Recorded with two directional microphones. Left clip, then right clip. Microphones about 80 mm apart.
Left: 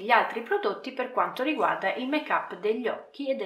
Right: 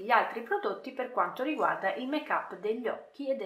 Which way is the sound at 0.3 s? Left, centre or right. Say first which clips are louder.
Left 4 dB; left.